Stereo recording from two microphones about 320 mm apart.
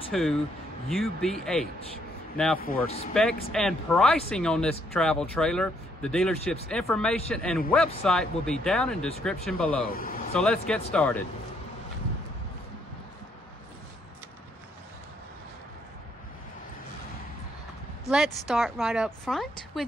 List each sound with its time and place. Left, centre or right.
0.1 s speech: centre
9.8 s speech: left
10.3 s speech: centre
18.1 s speech: centre